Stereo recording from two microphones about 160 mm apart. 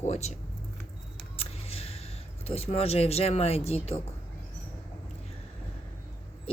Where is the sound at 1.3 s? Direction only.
40° left (ahead or behind).